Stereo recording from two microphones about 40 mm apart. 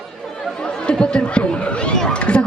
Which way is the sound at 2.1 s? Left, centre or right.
Left.